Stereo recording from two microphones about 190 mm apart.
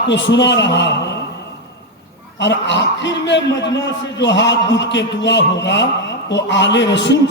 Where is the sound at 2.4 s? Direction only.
70° left (ahead or behind).